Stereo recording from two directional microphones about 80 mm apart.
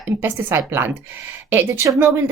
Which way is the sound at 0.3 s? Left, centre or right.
Right.